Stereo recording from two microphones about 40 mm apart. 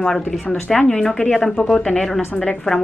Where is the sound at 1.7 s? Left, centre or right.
Centre.